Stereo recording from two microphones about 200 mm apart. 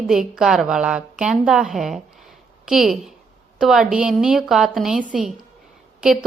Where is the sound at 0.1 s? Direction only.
5° right (ahead or behind).